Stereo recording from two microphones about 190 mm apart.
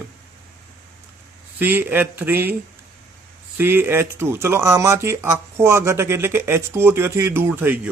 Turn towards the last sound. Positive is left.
turn(degrees=-10)  # may be behind; listen again after turning